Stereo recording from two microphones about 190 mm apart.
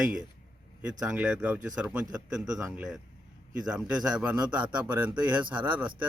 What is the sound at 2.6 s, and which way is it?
Speech, 15° right (ahead or behind).